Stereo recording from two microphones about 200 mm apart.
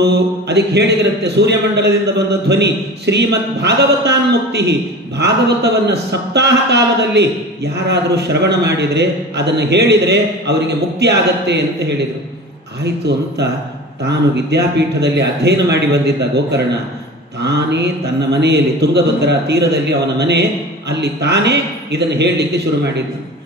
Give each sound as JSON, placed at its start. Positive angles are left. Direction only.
{"t": 0.0, "sound": "speech", "side_deg": -55}
{"t": 14.0, "sound": "speech", "side_deg": -55}